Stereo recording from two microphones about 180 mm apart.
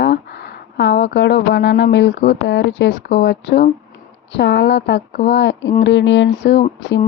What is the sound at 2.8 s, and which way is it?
Speech, 65° left (ahead or behind).